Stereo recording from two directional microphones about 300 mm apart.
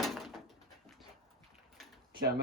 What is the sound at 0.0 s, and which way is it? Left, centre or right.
Door, centre.